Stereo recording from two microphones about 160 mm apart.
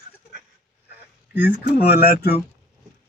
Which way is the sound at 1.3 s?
10° right (ahead or behind).